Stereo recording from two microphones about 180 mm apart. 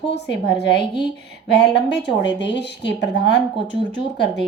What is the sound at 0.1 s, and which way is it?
Speech, 70° left (ahead or behind).